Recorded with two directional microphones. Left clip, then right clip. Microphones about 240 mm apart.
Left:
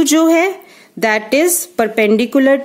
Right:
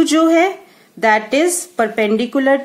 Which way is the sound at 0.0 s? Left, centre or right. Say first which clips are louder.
Left 1 dB; left.